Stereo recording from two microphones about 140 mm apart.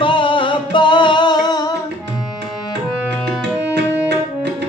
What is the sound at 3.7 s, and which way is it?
Music, 20° left (ahead or behind).